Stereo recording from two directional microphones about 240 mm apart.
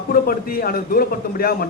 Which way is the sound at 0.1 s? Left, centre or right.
Left.